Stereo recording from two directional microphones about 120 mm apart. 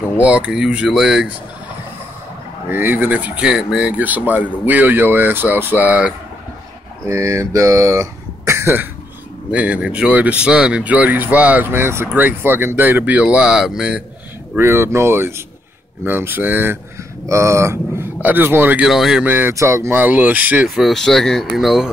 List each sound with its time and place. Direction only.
0.2 s speech: 10° right (ahead or behind)
2.7 s speech: 15° right (ahead or behind)
7.1 s speech: 25° right (ahead or behind)
9.5 s speech: 10° right (ahead or behind)
14.6 s speech: 20° right (ahead or behind)
18.9 s speech: 5° right (ahead or behind)
19.2 s speech: 15° right (ahead or behind)